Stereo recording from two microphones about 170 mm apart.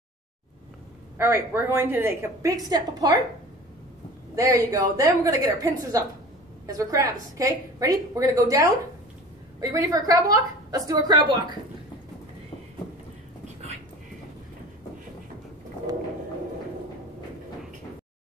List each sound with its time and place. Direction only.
1.1 s a woman's voice: 15° right (ahead or behind)
4.4 s a woman's voice: 20° right (ahead or behind)